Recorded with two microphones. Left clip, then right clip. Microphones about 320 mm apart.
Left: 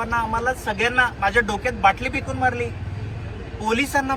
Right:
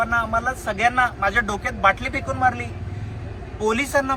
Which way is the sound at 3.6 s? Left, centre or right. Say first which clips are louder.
Right 1 dB; centre.